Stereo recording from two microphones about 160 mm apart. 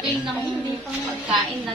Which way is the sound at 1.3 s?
Centre (ahead or behind).